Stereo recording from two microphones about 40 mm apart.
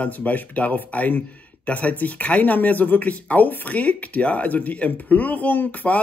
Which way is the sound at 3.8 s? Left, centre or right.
Left.